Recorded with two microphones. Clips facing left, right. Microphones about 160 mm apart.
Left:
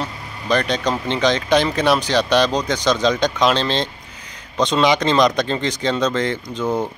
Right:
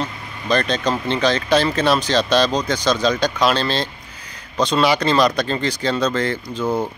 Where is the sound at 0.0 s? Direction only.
15° left (ahead or behind).